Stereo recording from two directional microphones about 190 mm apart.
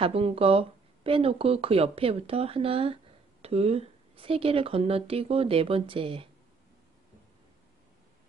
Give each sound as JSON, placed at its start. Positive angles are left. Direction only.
{"t": 0.0, "sound": "speech", "side_deg": -30}